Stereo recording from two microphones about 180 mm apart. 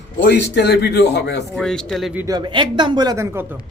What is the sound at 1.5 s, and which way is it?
Speech, 5° left (ahead or behind).